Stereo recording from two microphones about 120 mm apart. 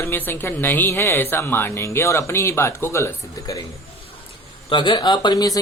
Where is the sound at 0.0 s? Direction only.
20° left (ahead or behind).